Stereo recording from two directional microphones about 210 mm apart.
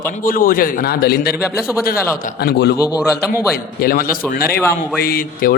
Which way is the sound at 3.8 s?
45° left (ahead or behind).